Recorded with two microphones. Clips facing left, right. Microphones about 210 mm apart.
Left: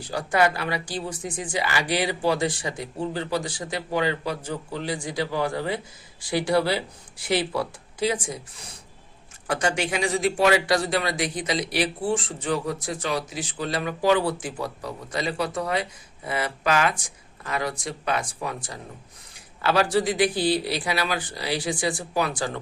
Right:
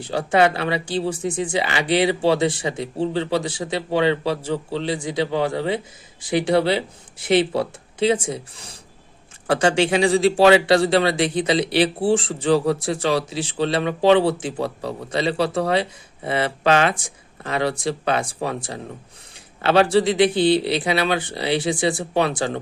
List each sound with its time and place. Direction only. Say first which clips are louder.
0.0 s a man's voice: right 5 dB; 25° right (ahead or behind)
4.4 s a man's voice: right 7 dB; 70° right (ahead or behind)
4.8 s a man's voice: right 5 dB; 25° right (ahead or behind)